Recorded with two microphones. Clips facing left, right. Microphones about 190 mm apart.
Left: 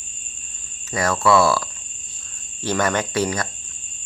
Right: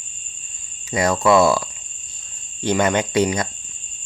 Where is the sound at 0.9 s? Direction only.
20° right (ahead or behind).